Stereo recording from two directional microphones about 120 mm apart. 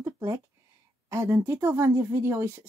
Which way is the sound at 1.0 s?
20° right (ahead or behind).